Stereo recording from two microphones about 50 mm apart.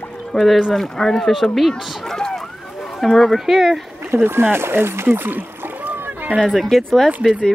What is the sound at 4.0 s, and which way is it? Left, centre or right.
Speech, right.